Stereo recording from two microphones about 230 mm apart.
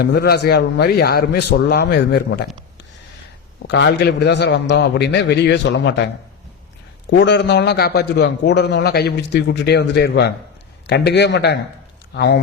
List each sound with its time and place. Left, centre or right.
0.0 s a man's voice: left
3.7 s a man's voice: left
7.1 s a man's voice: left